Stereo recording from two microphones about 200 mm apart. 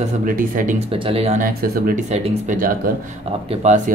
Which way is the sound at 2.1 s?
30° right (ahead or behind).